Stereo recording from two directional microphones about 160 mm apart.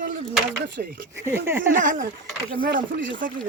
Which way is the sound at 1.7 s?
55° right (ahead or behind).